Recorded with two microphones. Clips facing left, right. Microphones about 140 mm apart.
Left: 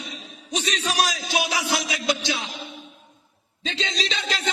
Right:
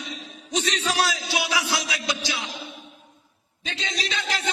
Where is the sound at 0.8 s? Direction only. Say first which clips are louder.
Even; 15° left (ahead or behind).